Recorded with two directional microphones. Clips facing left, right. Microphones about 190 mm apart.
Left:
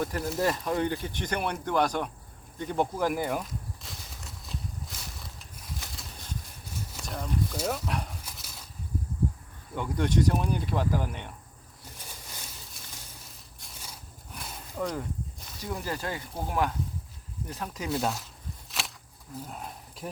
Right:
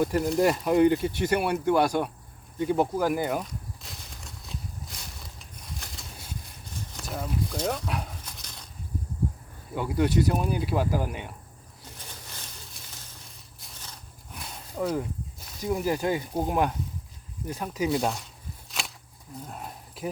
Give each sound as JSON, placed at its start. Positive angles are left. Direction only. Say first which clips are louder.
{"t": 0.2, "sound": "speech", "louder": "right 6 dB", "side_deg": 0}
{"t": 0.6, "sound": "speech", "louder": "right 8 dB", "side_deg": -10}
{"t": 2.6, "sound": "walk", "louder": "right 4 dB", "side_deg": -5}
{"t": 6.9, "sound": "a sound", "louder": "right 1 dB", "side_deg": -5}
{"t": 9.7, "sound": "speech", "louder": "right 3 dB", "side_deg": -5}
{"t": 13.7, "sound": "a sound", "louder": "left 1 dB", "side_deg": 10}
{"t": 14.8, "sound": "speech", "louder": "right 4 dB", "side_deg": -10}
{"t": 18.7, "sound": "a sound", "louder": "right 1 dB", "side_deg": 0}
{"t": 19.5, "sound": "speech", "louder": "right 1 dB", "side_deg": 0}